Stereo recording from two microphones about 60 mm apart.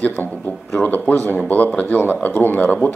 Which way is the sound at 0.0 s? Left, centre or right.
Left.